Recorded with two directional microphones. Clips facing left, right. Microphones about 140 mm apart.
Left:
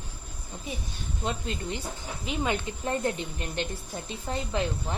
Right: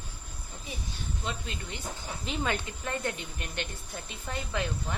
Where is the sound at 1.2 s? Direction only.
35° left (ahead or behind).